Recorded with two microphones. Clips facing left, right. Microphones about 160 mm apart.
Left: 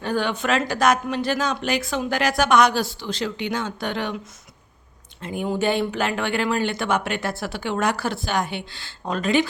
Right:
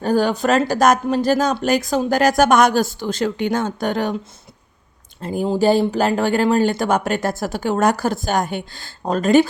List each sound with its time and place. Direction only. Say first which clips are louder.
0.0 s speech: right 6 dB; 40° right (ahead or behind)
5.2 s speech: right 6 dB; 35° right (ahead or behind)